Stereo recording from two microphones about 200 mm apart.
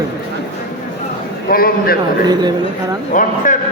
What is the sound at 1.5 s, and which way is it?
Speech, 45° left (ahead or behind).